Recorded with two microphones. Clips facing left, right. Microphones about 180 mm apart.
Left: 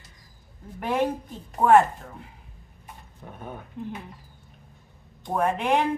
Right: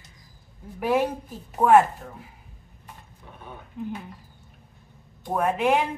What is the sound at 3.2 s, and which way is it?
Speech, 45° left (ahead or behind).